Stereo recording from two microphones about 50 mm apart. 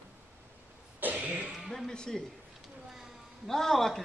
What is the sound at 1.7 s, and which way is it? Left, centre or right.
Speech, centre.